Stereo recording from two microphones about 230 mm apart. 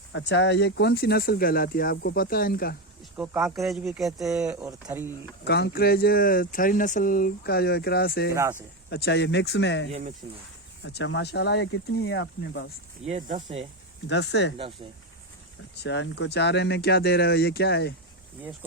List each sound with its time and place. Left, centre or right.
0.1 s speech: left
3.2 s speech: centre
5.5 s speech: left
8.3 s speech: centre
8.9 s speech: left
10.2 s speech: right
10.8 s speech: left
13.1 s speech: right
14.1 s speech: left
15.8 s speech: left